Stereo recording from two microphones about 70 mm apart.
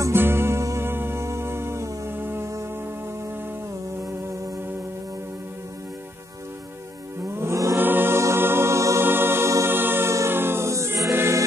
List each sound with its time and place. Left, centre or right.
0.1 s music: right
7.2 s music: right
7.7 s music: right
9.0 s music: right
9.7 s music: right